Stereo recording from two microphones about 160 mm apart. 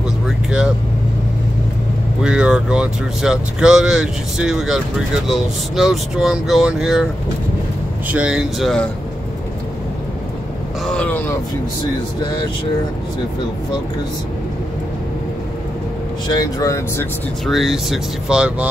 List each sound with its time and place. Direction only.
2.2 s speech: 5° right (ahead or behind)
8.1 s speech: 5° right (ahead or behind)
10.9 s speech: 10° left (ahead or behind)
16.3 s speech: 25° left (ahead or behind)
17.5 s speech: centre (ahead or behind)